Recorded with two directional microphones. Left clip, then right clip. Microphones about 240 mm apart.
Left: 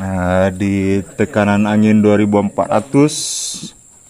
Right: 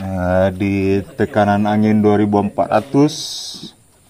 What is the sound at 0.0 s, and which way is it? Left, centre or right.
A man's voice, centre.